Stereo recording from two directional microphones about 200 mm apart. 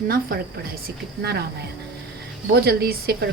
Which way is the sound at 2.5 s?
50° right (ahead or behind).